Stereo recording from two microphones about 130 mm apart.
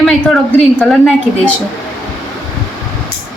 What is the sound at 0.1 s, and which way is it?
A woman's voice, 5° left (ahead or behind).